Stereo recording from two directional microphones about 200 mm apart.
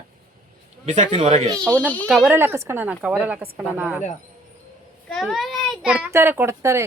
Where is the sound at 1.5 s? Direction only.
5° left (ahead or behind).